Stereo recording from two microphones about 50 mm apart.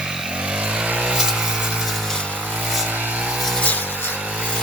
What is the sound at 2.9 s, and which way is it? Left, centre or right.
Vehicle, right.